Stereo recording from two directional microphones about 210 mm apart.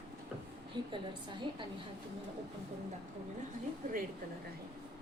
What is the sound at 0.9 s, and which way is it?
Speech, 20° right (ahead or behind).